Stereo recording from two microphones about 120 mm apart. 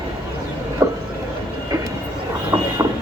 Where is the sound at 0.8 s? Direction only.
25° right (ahead or behind).